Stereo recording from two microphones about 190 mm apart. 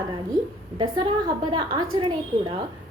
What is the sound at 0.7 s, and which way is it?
A woman's voice, 25° right (ahead or behind).